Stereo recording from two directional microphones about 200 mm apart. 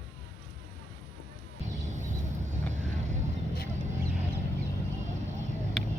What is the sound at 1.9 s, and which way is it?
Vehicle, 35° right (ahead or behind).